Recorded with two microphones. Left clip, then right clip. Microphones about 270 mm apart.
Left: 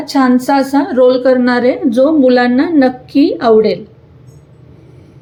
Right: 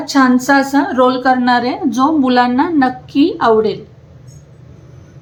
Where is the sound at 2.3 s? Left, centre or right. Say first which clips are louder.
Left 2 dB; right.